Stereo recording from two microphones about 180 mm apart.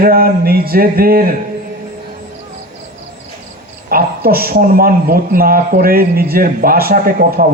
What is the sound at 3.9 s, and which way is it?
A man's voice, 55° right (ahead or behind).